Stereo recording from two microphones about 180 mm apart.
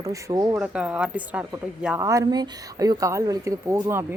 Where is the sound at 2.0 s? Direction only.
20° right (ahead or behind).